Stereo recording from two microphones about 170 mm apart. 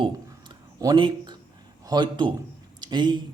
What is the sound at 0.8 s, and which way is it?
Speech, 25° right (ahead or behind).